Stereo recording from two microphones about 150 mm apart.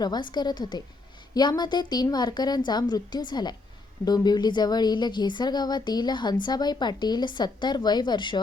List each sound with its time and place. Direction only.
0.0 s speech: 30° left (ahead or behind)